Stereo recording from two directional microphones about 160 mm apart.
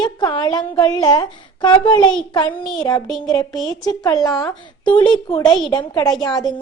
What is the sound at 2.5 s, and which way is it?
Speech, 5° left (ahead or behind).